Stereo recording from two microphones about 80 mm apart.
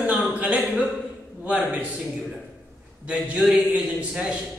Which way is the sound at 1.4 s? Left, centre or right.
Centre.